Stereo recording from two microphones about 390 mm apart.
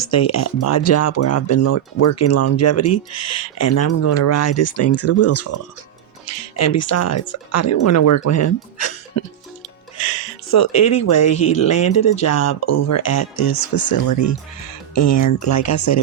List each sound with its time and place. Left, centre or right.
0.0 s speech: left